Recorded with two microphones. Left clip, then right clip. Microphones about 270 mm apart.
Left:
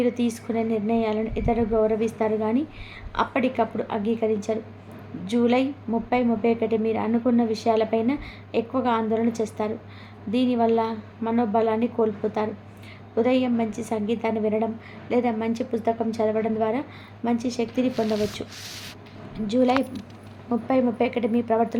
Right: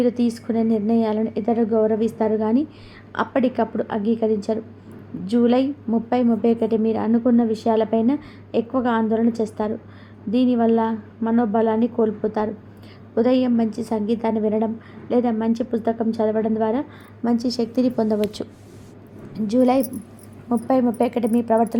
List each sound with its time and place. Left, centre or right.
0.0 s a woman's voice: centre